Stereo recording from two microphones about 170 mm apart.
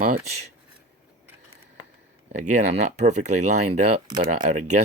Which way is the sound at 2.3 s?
45° right (ahead or behind).